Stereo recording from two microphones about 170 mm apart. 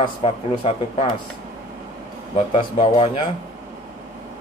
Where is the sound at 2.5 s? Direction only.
30° left (ahead or behind).